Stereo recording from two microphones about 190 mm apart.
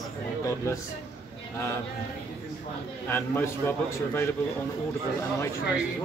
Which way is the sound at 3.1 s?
10° left (ahead or behind).